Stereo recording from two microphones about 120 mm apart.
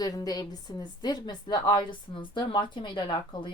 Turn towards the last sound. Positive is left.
turn(degrees=40)  # may be behind; listen again after turning